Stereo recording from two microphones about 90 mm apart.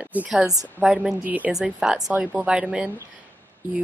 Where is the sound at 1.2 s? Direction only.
15° right (ahead or behind).